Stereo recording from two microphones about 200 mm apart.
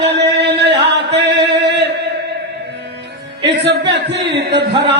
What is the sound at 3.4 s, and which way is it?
Music, 60° right (ahead or behind).